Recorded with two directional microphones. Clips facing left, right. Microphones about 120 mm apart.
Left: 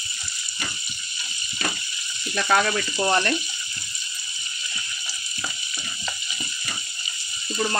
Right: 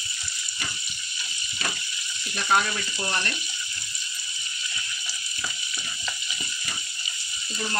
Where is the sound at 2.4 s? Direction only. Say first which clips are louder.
Left 2 dB; 75° left (ahead or behind).